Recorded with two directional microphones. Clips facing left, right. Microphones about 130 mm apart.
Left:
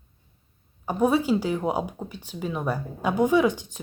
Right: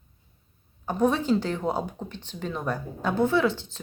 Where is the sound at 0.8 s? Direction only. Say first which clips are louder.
Left 1 dB; 10° left (ahead or behind).